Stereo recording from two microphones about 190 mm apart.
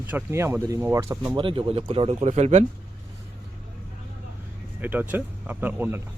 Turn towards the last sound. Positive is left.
turn(degrees=-10)  # may be behind; listen again after turning